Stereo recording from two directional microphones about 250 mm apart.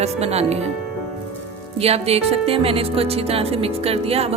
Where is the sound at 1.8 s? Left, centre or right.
Right.